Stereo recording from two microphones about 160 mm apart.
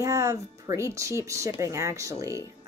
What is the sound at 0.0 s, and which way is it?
Speech, 20° right (ahead or behind).